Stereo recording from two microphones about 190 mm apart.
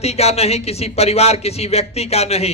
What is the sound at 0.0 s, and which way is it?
A man's voice, 35° left (ahead or behind).